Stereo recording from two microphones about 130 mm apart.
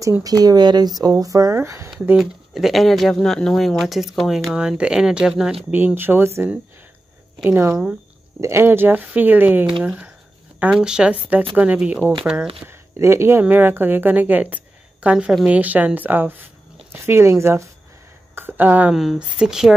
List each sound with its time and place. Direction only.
0.2 s speech: 30° right (ahead or behind)
2.1 s a woman's voice: centre (ahead or behind)